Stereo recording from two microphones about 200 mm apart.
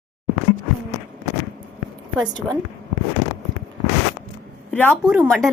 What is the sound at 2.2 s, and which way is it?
Speech, 20° right (ahead or behind).